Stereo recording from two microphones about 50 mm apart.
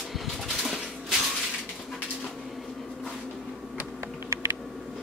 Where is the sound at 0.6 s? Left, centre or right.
Centre.